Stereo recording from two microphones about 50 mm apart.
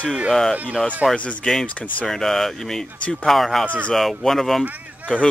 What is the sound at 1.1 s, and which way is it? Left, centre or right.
Speech, left.